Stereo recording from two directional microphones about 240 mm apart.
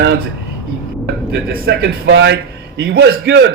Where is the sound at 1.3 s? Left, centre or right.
Right.